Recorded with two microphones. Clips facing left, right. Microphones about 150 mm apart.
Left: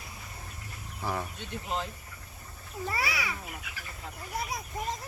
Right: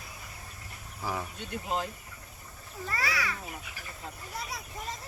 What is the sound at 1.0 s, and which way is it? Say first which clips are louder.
Speech: left 1 dB; centre (ahead or behind).